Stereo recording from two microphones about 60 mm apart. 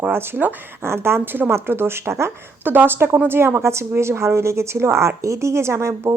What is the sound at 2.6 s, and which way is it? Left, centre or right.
A woman's voice, right.